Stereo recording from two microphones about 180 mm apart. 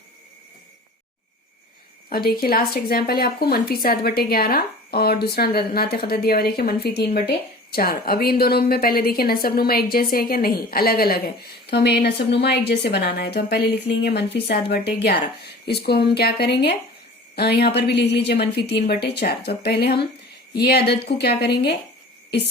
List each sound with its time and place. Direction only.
2.0 s a woman's voice: 55° left (ahead or behind)
11.6 s a woman's voice: 70° left (ahead or behind)